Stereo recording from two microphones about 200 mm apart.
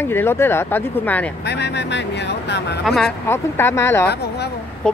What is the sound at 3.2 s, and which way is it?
Speech, 10° left (ahead or behind).